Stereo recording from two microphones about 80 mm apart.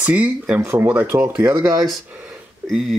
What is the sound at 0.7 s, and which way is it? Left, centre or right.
Speech, right.